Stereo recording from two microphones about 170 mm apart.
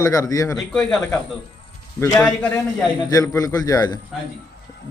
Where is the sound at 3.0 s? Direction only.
20° left (ahead or behind).